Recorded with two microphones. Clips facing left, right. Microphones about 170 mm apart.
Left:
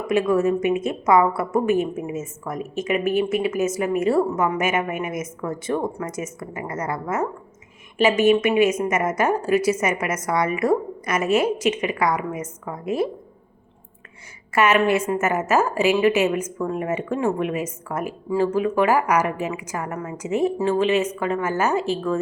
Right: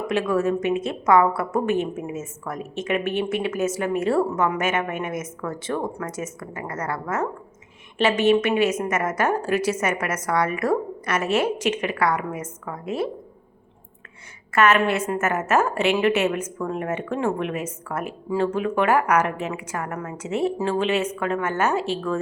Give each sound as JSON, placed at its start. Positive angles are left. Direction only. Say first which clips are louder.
{"t": 0.1, "sound": "a woman's voice", "louder": "left 3 dB", "side_deg": 10}
{"t": 14.5, "sound": "a woman's voice", "louder": "left 1 dB", "side_deg": 15}